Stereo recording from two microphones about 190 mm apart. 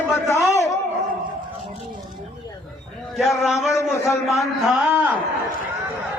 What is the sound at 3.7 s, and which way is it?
Speech, 15° left (ahead or behind).